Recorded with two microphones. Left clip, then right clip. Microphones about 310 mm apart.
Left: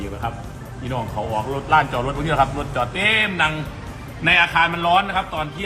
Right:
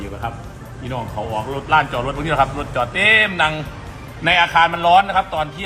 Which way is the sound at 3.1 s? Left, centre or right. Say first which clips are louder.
Right 3 dB; right.